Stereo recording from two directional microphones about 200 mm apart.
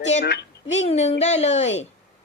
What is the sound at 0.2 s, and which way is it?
Speech, 55° left (ahead or behind).